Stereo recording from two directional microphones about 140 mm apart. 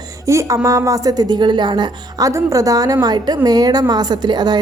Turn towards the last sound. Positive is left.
turn(degrees=-30)  # may be behind; listen again after turning